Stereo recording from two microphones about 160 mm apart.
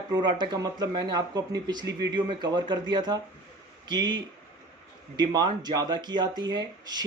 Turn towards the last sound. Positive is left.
turn(degrees=-25)  # may be behind; listen again after turning